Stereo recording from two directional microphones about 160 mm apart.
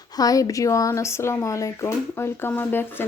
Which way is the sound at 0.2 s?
25° left (ahead or behind).